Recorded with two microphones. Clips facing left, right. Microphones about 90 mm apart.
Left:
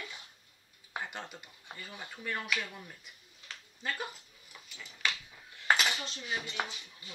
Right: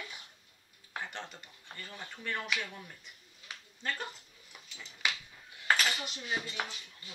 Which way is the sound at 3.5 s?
15° right (ahead or behind).